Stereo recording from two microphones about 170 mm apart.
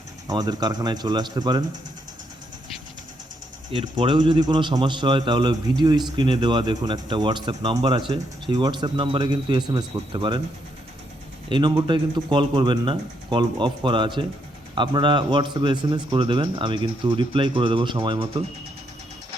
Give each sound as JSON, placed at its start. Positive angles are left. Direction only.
{"t": 0.3, "sound": "speech", "side_deg": -25}
{"t": 3.7, "sound": "speech", "side_deg": -30}
{"t": 11.4, "sound": "speech", "side_deg": -25}